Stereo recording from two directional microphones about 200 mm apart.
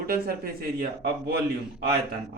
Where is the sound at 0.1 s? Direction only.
50° right (ahead or behind).